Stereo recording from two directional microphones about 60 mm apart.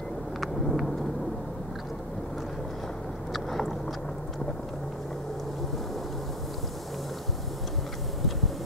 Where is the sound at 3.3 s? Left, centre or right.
Centre.